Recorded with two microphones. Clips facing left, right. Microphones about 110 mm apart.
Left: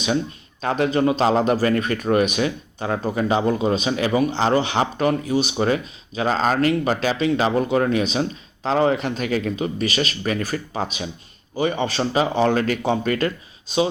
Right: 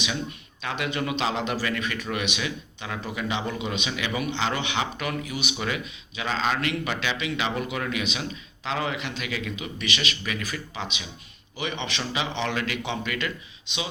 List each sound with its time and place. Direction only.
0.6 s a man's voice: 40° left (ahead or behind)